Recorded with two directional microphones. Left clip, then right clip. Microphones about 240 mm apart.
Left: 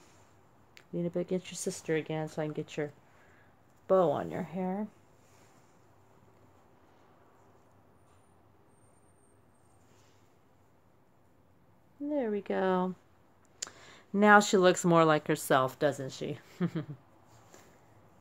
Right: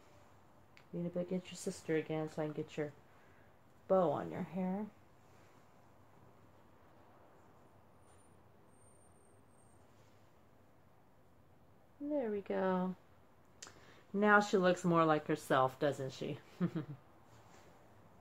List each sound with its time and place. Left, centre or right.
0.7 s speech: left
12.1 s speech: left